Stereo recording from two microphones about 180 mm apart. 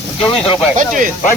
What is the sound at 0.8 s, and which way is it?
Speech, 45° right (ahead or behind).